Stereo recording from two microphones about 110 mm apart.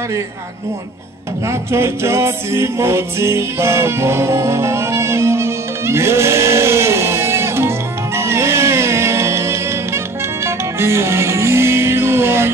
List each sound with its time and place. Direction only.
1.5 s music: 25° right (ahead or behind)